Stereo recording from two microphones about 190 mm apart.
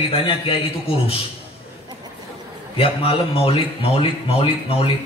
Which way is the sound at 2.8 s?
30° left (ahead or behind).